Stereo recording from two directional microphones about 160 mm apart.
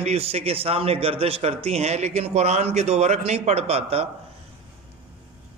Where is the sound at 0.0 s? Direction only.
40° right (ahead or behind).